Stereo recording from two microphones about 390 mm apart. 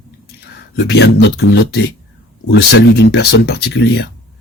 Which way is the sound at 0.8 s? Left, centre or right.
Left.